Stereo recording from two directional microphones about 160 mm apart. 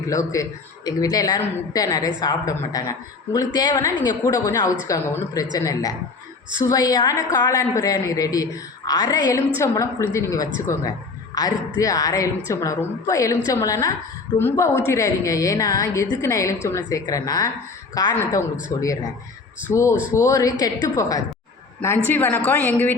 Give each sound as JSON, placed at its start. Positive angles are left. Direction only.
{"t": 0.1, "sound": "a man's voice", "side_deg": 20}